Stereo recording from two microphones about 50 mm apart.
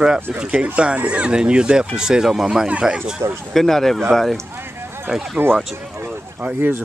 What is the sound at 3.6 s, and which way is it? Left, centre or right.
Speech, centre.